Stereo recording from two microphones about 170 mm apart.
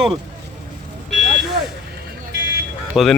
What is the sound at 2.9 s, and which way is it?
Speech, centre (ahead or behind).